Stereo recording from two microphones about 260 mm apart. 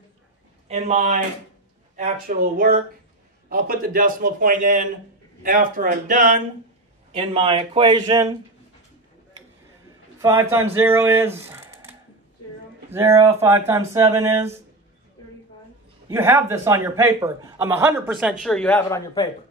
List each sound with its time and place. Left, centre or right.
0.7 s a man's voice: right
10.2 s speech: centre
12.9 s a man's voice: centre
16.1 s a man's voice: centre